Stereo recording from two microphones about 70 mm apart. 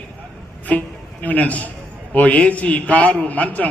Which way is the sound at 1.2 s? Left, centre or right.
Left.